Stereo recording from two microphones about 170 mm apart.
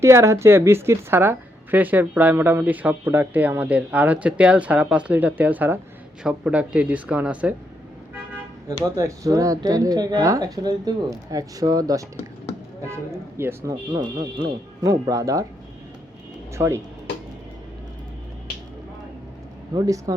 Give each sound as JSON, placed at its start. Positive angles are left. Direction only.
{"t": 0.0, "sound": "speech", "side_deg": -15}
{"t": 9.0, "sound": "speech", "side_deg": -20}
{"t": 13.9, "sound": "speech", "side_deg": -25}
{"t": 16.5, "sound": "speech", "side_deg": -15}
{"t": 19.7, "sound": "speech", "side_deg": -20}